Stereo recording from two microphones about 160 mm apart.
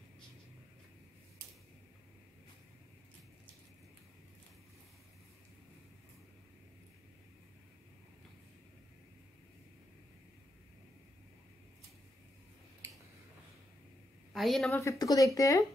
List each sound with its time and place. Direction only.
14.3 s a woman's voice: centre (ahead or behind)
14.7 s speech: 20° left (ahead or behind)